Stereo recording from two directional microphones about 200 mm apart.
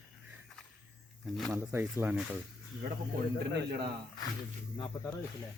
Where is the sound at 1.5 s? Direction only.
10° right (ahead or behind).